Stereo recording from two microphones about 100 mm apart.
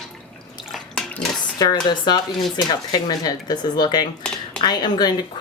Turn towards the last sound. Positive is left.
turn(degrees=45)  # may be behind; listen again after turning